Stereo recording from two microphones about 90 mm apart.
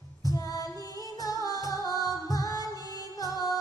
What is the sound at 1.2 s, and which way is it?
Music, 40° left (ahead or behind).